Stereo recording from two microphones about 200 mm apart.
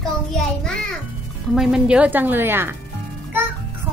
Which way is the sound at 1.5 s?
5° right (ahead or behind).